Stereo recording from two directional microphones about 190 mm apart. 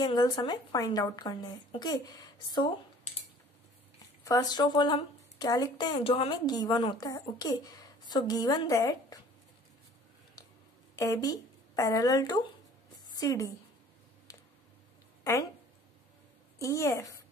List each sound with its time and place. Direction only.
0.0 s speech: 20° left (ahead or behind)
4.2 s speech: 20° left (ahead or behind)
11.0 s a woman's voice: 15° left (ahead or behind)
14.3 s a sound: 20° left (ahead or behind)
16.5 s a woman's voice: 15° left (ahead or behind)